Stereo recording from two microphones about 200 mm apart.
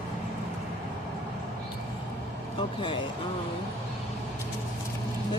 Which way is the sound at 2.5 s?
25° left (ahead or behind).